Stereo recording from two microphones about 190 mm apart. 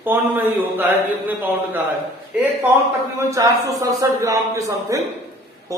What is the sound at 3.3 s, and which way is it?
A man's voice, 15° right (ahead or behind).